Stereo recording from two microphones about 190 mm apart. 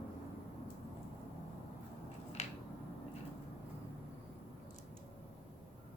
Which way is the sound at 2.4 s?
35° left (ahead or behind).